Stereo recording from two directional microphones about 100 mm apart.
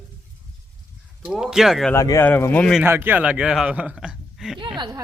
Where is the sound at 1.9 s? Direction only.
35° left (ahead or behind).